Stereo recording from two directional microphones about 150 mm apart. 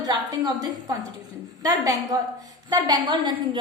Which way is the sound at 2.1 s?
25° right (ahead or behind).